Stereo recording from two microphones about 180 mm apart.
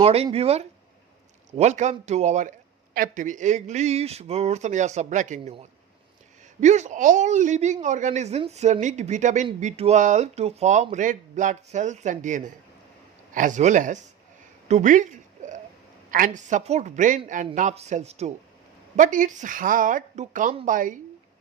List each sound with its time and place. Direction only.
0.0 s speech: 35° right (ahead or behind)
6.6 s speech: 40° right (ahead or behind)
14.7 s a sound: 45° right (ahead or behind)
16.1 s speech: 45° right (ahead or behind)